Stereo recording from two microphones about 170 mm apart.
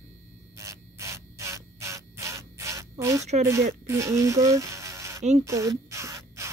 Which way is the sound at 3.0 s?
20° right (ahead or behind).